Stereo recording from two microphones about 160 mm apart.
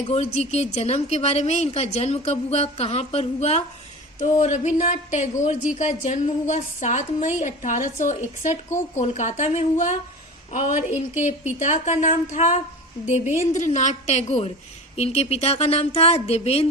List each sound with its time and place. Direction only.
0.1 s a woman's voice: 45° left (ahead or behind)